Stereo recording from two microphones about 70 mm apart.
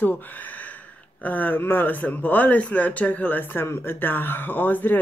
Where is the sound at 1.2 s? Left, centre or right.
Left.